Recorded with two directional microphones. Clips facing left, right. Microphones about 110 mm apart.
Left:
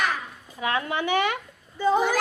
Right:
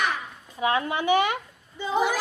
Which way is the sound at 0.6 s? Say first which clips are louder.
Right 2 dB; 25° right (ahead or behind).